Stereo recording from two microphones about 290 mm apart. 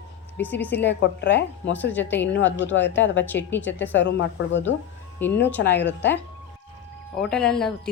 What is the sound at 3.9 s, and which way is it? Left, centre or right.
A woman's voice, left.